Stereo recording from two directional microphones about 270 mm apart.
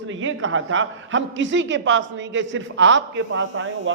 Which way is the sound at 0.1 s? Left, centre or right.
Right.